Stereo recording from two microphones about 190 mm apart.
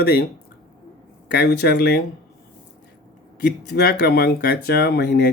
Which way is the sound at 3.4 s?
60° left (ahead or behind).